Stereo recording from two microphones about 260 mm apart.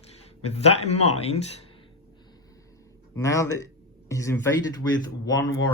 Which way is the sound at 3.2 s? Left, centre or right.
Centre.